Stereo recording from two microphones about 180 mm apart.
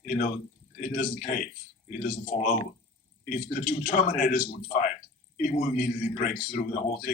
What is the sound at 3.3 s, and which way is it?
A man's voice, 50° left (ahead or behind).